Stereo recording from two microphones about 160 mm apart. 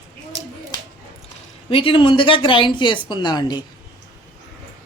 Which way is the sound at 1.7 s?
35° left (ahead or behind).